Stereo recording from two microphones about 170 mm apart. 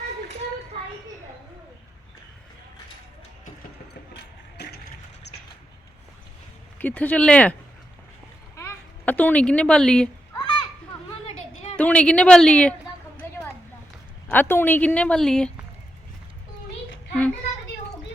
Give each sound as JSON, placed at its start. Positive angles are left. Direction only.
{"t": 4.1, "sound": "music", "side_deg": 80}
{"t": 6.7, "sound": "a woman's voice", "side_deg": 10}
{"t": 8.5, "sound": "a sound", "side_deg": 15}
{"t": 10.3, "sound": "children playing", "side_deg": 25}
{"t": 11.8, "sound": "speech", "side_deg": 5}
{"t": 14.3, "sound": "a woman's voice", "side_deg": 10}